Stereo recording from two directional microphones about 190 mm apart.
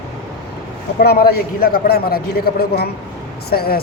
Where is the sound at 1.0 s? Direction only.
55° left (ahead or behind).